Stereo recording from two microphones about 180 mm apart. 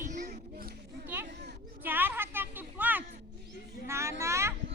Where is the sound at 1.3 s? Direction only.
65° right (ahead or behind).